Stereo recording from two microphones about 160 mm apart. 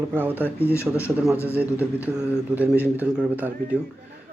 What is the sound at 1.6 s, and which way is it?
A man's voice, 10° right (ahead or behind).